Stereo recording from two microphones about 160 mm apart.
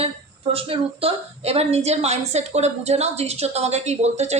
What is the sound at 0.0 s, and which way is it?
A woman's voice, 35° right (ahead or behind).